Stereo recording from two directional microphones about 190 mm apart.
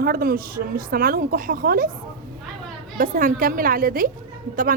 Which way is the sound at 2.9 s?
45° right (ahead or behind).